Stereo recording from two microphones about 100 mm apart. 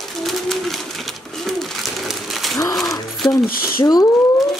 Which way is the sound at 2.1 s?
Centre (ahead or behind).